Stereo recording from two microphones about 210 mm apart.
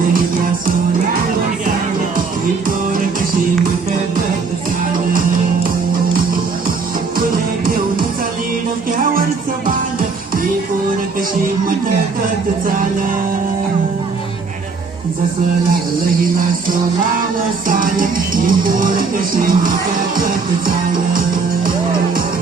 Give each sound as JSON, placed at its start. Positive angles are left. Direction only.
{"t": 5.6, "sound": "music", "side_deg": -40}
{"t": 17.7, "sound": "music", "side_deg": -40}